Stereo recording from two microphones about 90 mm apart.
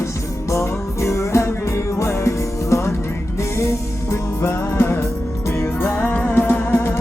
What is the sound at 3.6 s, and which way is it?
Music, 30° left (ahead or behind).